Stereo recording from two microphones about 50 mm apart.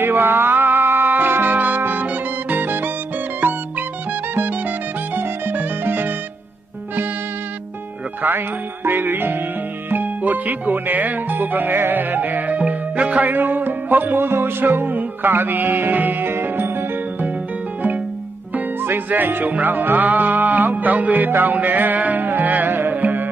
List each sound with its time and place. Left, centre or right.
0.0 s music: right
4.4 s music: right
8.8 s music: right
9.8 s speech: right
13.3 s music: right
18.8 s music: right